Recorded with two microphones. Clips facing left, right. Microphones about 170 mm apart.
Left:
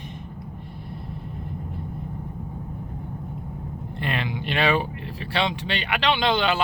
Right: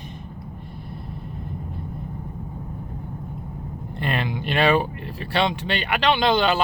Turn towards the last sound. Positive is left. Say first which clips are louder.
# right 3 dB
turn(degrees=-40)  # may be behind; listen again after turning